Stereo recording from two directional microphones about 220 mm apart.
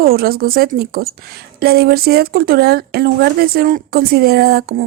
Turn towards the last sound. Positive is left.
turn(degrees=-45)  # may be behind; listen again after turning